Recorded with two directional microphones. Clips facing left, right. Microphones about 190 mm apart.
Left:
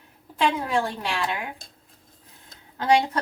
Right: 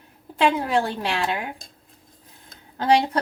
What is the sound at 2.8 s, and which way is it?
Speech, 35° right (ahead or behind).